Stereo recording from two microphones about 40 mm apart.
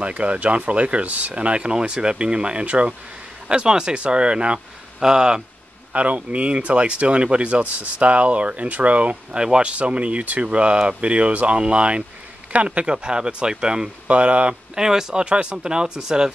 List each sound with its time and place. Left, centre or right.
0.0 s speech: right
1.3 s speech: right
3.4 s speech: right
5.9 s speech: right
14.0 s speech: right
14.8 s speech: centre
15.2 s speech: right